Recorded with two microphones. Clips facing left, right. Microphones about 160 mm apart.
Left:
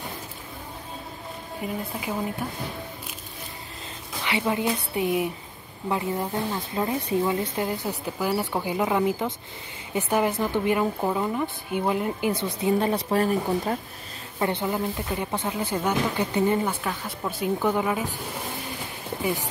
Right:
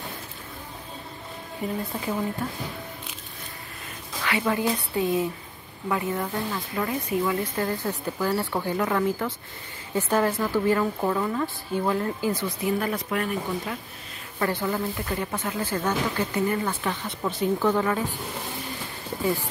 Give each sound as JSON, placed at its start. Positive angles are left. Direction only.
{"t": 1.6, "sound": "speech", "side_deg": 5}
{"t": 4.2, "sound": "a woman's voice", "side_deg": 20}
{"t": 14.4, "sound": "speech", "side_deg": 20}
{"t": 16.6, "sound": "a woman's voice", "side_deg": 10}